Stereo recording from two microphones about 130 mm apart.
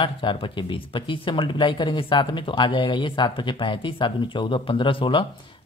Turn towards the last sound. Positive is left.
turn(degrees=40)  # may be behind; listen again after turning